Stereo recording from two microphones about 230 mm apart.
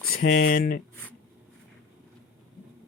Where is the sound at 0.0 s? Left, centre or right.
Left.